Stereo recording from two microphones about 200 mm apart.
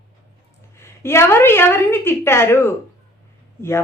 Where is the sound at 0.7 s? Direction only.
15° left (ahead or behind).